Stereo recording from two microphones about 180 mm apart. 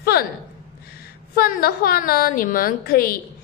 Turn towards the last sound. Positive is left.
turn(degrees=55)  # may be behind; listen again after turning